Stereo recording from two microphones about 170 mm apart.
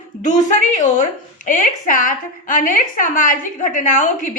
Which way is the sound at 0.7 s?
50° left (ahead or behind).